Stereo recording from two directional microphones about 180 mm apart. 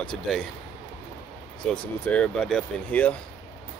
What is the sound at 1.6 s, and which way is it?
Speech, 5° left (ahead or behind).